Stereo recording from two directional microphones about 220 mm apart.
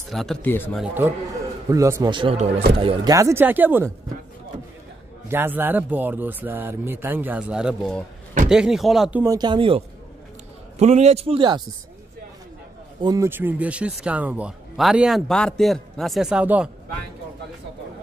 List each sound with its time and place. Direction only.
0.1 s speech: centre (ahead or behind)
1.7 s speech: 15° right (ahead or behind)
3.2 s speech: 10° right (ahead or behind)
5.3 s speech: 10° right (ahead or behind)
9.2 s speech: 15° right (ahead or behind)
13.0 s speech: 15° right (ahead or behind)